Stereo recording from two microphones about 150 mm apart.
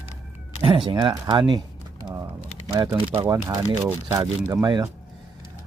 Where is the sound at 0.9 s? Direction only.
30° right (ahead or behind).